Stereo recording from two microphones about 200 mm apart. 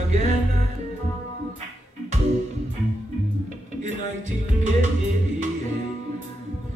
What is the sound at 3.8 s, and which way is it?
Music, 40° right (ahead or behind).